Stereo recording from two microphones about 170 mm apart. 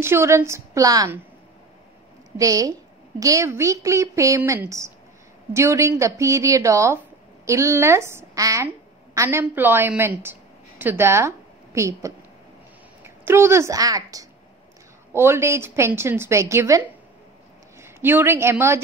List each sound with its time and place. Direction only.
0.0 s speech: 15° right (ahead or behind)
2.3 s a woman's voice: 20° right (ahead or behind)